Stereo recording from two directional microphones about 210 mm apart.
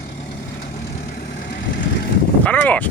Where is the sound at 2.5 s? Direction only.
5° left (ahead or behind).